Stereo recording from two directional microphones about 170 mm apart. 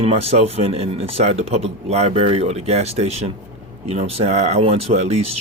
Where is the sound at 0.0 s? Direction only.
35° right (ahead or behind).